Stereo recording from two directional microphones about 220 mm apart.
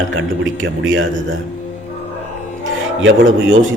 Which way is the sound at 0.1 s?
60° right (ahead or behind).